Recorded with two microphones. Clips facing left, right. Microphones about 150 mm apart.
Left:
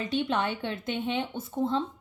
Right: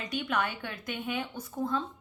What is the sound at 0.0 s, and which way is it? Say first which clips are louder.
Speech: left 4 dB; 25° left (ahead or behind).